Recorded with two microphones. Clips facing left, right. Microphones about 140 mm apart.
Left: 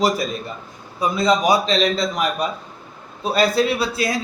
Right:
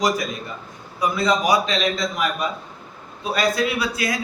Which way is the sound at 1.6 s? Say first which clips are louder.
Left 4 dB; 35° left (ahead or behind).